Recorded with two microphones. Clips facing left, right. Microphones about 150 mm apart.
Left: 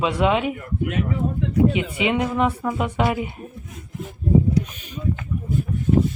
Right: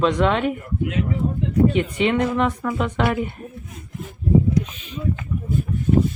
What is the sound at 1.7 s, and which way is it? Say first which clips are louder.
Speech: right 2 dB; 10° left (ahead or behind).